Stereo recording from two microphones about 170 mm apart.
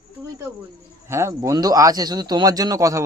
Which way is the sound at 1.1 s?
15° right (ahead or behind).